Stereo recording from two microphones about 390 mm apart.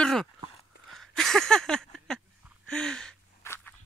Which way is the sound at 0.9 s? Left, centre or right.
Centre.